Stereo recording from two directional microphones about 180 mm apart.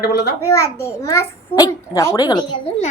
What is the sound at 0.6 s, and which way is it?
A child's voice, 15° left (ahead or behind).